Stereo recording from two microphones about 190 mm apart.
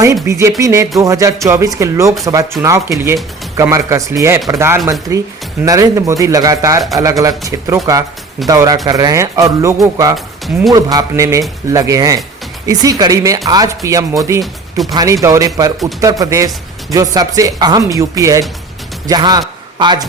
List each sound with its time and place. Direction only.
0.0 s speech: 15° right (ahead or behind)
10.2 s speech: centre (ahead or behind)
10.7 s speech: 20° right (ahead or behind)
14.4 s speech: centre (ahead or behind)
14.9 s a man's voice: 15° right (ahead or behind)